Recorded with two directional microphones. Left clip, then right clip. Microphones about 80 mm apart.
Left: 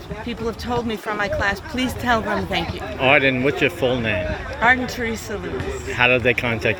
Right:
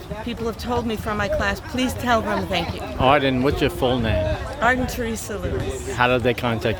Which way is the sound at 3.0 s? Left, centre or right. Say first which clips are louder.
Left 1 dB; right.